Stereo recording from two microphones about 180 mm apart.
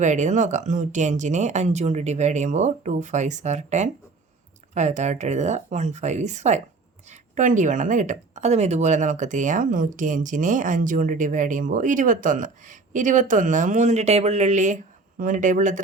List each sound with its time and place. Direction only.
0.0 s speech: 40° right (ahead or behind)